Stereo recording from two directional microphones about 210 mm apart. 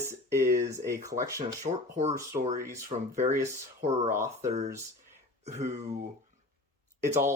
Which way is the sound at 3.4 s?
30° right (ahead or behind).